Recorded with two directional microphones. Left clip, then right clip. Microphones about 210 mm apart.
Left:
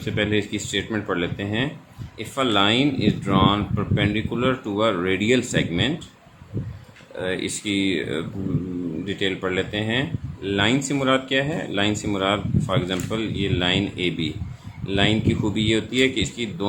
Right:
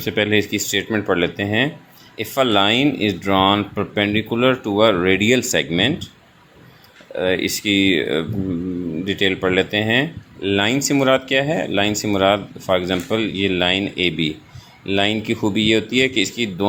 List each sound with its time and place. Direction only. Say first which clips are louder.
0.0 s speech: right 5 dB; 30° right (ahead or behind)
7.2 s speech: right 7 dB; 25° right (ahead or behind)